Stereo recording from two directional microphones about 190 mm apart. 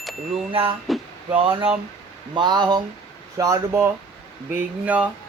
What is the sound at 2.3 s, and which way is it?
Speech, 25° right (ahead or behind).